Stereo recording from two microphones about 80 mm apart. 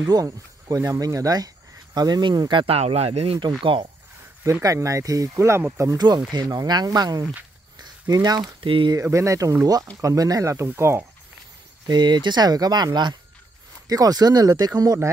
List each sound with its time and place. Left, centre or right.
0.0 s speech: right
3.3 s speech: right
4.4 s speech: right
5.9 s speech: right
9.1 s speech: right
10.5 s speech: right
11.8 s speech: right
13.8 s speech: right